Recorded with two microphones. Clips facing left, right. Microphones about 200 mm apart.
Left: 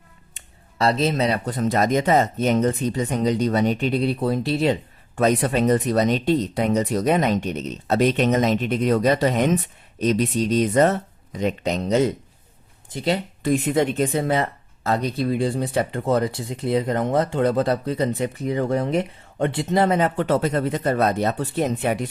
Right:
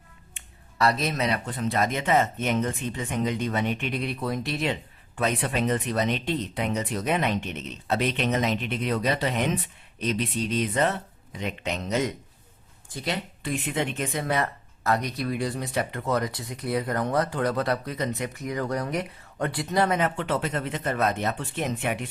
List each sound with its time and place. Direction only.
0.3 s speech: 30° left (ahead or behind)
13.4 s speech: 40° left (ahead or behind)